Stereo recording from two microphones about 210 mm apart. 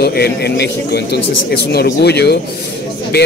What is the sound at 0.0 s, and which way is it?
A man's voice, 50° left (ahead or behind).